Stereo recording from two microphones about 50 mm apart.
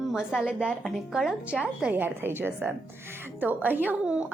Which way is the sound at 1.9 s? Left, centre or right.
Right.